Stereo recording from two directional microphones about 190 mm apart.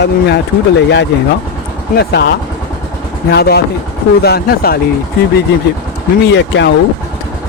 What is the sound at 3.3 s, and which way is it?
A man's voice, 60° left (ahead or behind).